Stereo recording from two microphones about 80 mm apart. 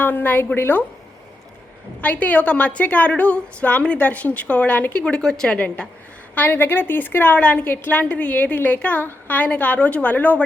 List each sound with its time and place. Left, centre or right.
0.0 s a woman's voice: left
2.0 s a woman's voice: centre